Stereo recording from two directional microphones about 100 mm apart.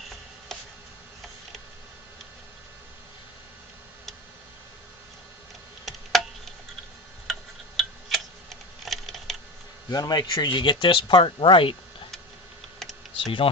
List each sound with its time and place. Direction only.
5.8 s a sound: centre (ahead or behind)
7.8 s tick-tock: centre (ahead or behind)
9.9 s speech: 40° left (ahead or behind); by 11.8 s 60° left (ahead or behind)
12.8 s computer keyboard: 5° left (ahead or behind)
13.1 s speech: 60° left (ahead or behind)